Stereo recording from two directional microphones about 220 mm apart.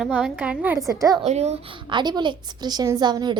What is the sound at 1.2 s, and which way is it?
A woman's voice, 30° right (ahead or behind).